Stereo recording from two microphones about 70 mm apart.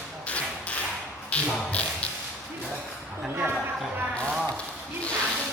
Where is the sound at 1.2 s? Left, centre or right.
Centre.